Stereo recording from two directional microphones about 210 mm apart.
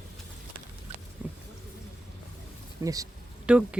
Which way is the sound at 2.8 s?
15° right (ahead or behind).